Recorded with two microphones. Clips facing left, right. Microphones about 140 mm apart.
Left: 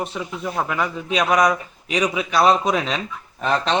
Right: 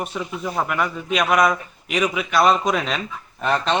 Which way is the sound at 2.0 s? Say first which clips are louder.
Even; 30° left (ahead or behind).